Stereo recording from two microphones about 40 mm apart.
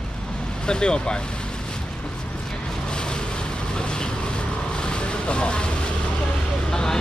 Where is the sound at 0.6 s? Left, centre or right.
Left.